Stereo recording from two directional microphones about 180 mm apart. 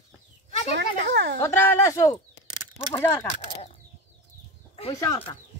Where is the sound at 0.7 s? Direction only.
85° right.